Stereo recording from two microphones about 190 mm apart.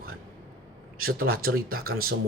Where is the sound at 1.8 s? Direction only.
90° right.